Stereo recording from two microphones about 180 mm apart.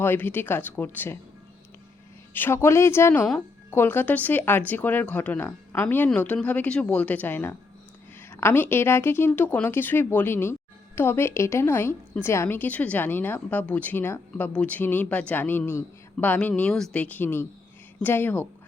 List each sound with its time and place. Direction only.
0.0 s a woman's voice: 10° left (ahead or behind)
2.3 s a woman's voice: 10° left (ahead or behind)